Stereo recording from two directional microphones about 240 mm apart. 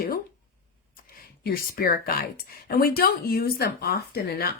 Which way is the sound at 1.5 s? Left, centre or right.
Left.